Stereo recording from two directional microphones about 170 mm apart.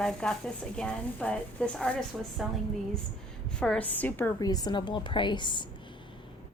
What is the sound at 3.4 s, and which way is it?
A woman's voice, 5° left (ahead or behind).